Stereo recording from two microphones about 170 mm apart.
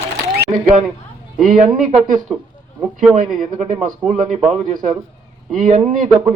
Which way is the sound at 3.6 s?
45° right (ahead or behind).